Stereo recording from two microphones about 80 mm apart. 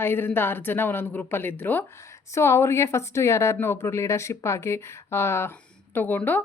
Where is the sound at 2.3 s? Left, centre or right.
Left.